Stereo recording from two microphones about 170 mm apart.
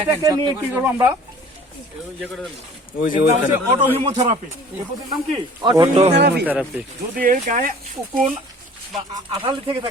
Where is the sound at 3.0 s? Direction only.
55° left (ahead or behind).